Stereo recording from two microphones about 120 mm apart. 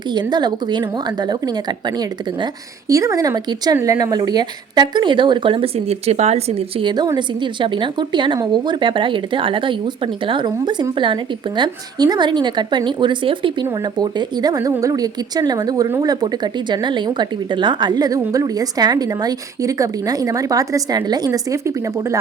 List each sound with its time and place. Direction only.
0.1 s a woman's voice: 35° right (ahead or behind)
2.9 s speech: 25° right (ahead or behind); by 6.8 s 60° right (ahead or behind)
6.8 s a woman's voice: 35° right (ahead or behind)